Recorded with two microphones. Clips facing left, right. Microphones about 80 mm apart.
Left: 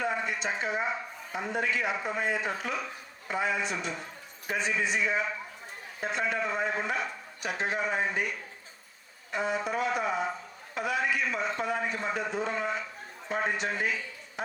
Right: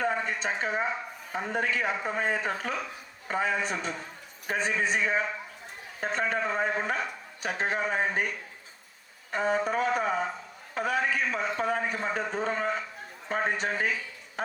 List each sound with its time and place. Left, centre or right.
0.0 s a sound: right
1.3 s a man's voice: right
9.3 s a man's voice: right